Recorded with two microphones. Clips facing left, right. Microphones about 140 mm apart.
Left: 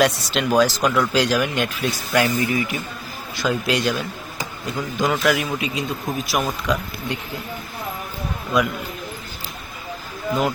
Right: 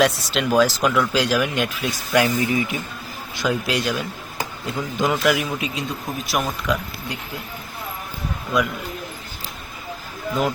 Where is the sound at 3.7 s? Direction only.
5° right (ahead or behind).